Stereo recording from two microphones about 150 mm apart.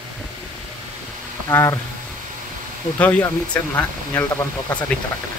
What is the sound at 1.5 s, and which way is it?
Speech, 20° left (ahead or behind).